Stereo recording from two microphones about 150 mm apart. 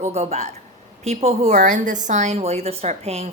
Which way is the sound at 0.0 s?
45° right (ahead or behind).